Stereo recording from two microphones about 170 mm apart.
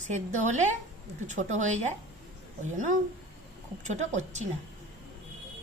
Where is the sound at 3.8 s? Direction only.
45° right (ahead or behind).